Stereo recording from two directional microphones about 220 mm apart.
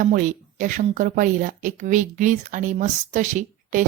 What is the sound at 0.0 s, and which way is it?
Speech, 35° right (ahead or behind).